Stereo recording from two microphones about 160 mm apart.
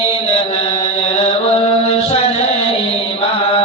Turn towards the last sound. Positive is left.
turn(degrees=35)  # may be behind; listen again after turning